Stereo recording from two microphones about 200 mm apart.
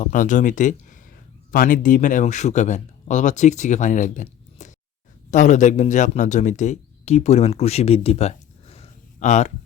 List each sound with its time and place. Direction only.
0.0 s speech: 40° left (ahead or behind)